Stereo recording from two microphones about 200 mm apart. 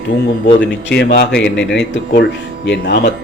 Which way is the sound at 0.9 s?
55° left (ahead or behind).